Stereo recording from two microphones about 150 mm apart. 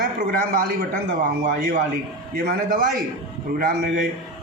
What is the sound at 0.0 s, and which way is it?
A man's voice, 75° right (ahead or behind).